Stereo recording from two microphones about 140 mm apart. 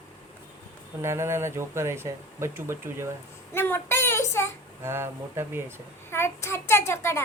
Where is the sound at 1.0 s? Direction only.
20° right (ahead or behind).